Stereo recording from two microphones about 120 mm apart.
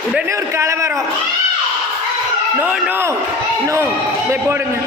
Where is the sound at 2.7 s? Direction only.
10° right (ahead or behind).